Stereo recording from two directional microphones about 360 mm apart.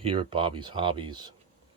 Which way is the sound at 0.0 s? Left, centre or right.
Centre.